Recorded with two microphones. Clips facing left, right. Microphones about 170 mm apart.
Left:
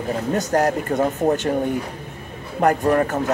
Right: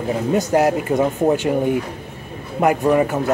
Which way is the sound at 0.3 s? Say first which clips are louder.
Right 3 dB; 10° right (ahead or behind).